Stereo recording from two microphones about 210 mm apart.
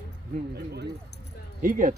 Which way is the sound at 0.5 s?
50° right (ahead or behind).